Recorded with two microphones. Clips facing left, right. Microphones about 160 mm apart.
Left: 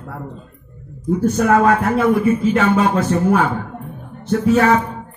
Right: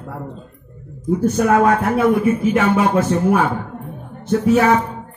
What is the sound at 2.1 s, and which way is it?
A man's voice, 20° right (ahead or behind).